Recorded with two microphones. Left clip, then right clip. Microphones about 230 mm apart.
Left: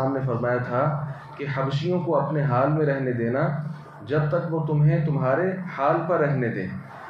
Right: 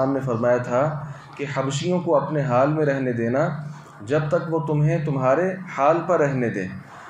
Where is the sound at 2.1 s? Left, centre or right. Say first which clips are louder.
Right 4 dB; right.